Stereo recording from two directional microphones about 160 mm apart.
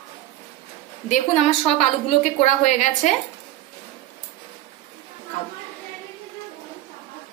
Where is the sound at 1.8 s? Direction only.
45° left (ahead or behind).